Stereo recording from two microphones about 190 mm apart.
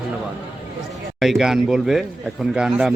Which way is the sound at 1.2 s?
Centre (ahead or behind).